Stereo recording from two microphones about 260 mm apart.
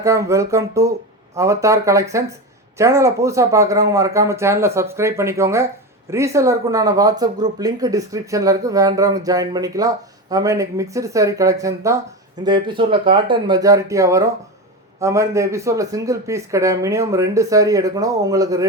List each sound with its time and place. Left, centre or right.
0.0 s speech: centre